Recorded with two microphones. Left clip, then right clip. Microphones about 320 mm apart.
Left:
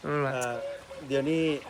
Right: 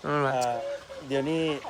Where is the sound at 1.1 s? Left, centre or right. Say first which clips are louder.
Even; right.